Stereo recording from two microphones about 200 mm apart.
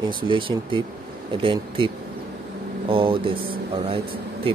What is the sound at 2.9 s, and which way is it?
Speech, 25° right (ahead or behind).